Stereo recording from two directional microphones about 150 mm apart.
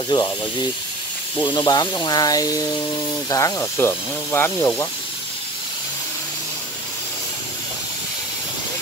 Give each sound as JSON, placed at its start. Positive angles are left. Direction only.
{"t": 0.1, "sound": "speech", "side_deg": 30}